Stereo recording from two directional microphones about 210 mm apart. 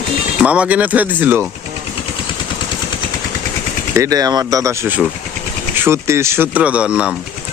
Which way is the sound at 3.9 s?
15° right (ahead or behind).